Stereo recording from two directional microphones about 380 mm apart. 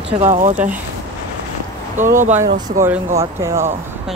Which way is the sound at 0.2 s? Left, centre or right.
Centre.